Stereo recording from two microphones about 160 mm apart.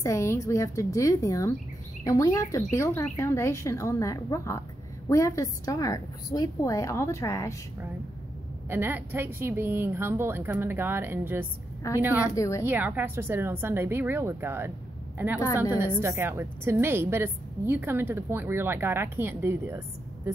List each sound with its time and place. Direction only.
0.0 s a woman's voice: 20° left (ahead or behind)
8.6 s a woman's voice: 15° right (ahead or behind)
12.4 s a woman's voice: 20° left (ahead or behind)
12.6 s a woman's voice: 10° right (ahead or behind)
16.0 s a woman's voice: 15° right (ahead or behind)